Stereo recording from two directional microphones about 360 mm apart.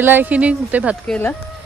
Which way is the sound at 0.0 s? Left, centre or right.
Centre.